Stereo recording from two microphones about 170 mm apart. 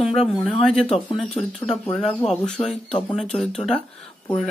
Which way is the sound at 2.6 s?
25° left (ahead or behind).